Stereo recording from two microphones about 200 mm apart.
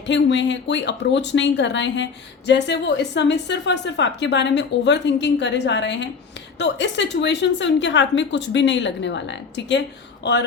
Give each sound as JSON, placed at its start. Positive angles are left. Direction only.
{"t": 0.1, "sound": "a woman's voice", "side_deg": 65}